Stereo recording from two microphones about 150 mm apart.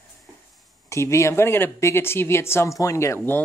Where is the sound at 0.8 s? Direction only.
20° left (ahead or behind).